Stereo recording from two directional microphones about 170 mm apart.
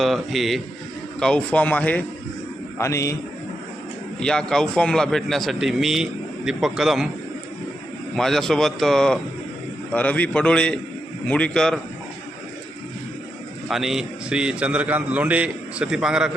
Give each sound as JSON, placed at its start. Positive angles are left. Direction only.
{"t": 0.0, "sound": "a man's voice", "side_deg": 0}
{"t": 4.2, "sound": "a man's voice", "side_deg": 5}
{"t": 8.1, "sound": "a man's voice", "side_deg": 0}
{"t": 13.7, "sound": "a man's voice", "side_deg": 0}